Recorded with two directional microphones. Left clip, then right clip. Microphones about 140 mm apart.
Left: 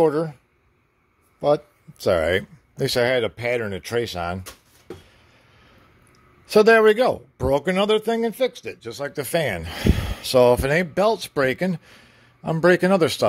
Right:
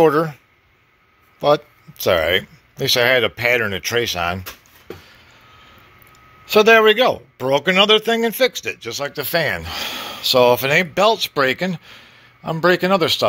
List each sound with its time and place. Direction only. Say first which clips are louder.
0.0 s speech: right 5 dB; 10° left (ahead or behind)
2.0 s speech: right 3 dB; 30° left (ahead or behind)
6.4 s speech: right 3 dB; 40° left (ahead or behind); by 8.7 s 15° left (ahead or behind)
8.7 s speech: right 5 dB; 30° left (ahead or behind)
9.1 s speech: right 3 dB; 45° left (ahead or behind)